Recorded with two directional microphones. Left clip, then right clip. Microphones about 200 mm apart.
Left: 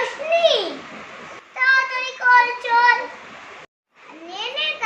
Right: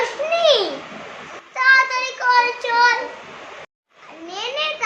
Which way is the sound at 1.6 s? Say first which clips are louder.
Right 3 dB; 15° right (ahead or behind).